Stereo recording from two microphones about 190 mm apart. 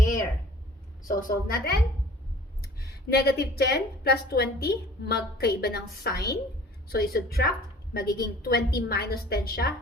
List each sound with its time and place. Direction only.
1.0 s a woman's voice: 55° left (ahead or behind)